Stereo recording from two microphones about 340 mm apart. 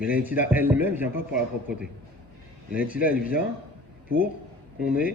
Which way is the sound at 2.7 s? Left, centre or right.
Centre.